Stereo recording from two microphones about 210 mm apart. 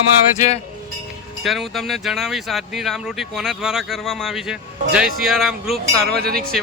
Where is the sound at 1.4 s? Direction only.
Centre (ahead or behind).